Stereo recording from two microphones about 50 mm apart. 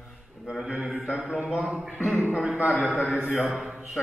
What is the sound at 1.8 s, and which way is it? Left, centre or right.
Speech, right.